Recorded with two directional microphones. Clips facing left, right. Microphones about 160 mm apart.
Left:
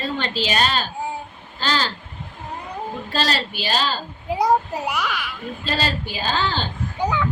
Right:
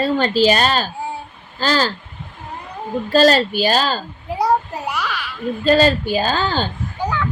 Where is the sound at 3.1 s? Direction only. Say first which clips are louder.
Right 12 dB; 45° right (ahead or behind).